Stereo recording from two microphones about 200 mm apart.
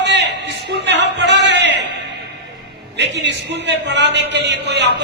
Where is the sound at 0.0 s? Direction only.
60° right (ahead or behind).